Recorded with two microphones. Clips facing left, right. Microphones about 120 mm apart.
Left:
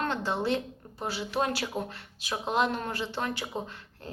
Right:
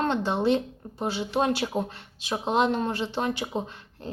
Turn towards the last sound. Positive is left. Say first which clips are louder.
# right 5 dB
turn(degrees=-25)  # may be behind; listen again after turning